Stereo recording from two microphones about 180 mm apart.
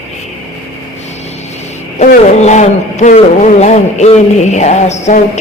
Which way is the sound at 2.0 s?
40° left (ahead or behind).